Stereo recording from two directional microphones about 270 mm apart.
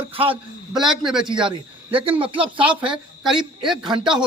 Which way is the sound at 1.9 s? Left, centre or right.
Centre.